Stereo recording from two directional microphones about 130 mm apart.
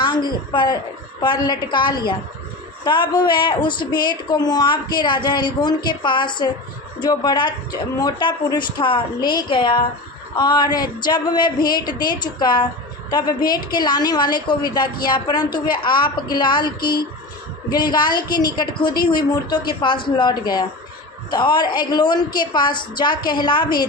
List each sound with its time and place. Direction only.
0.0 s a woman's voice: 35° left (ahead or behind)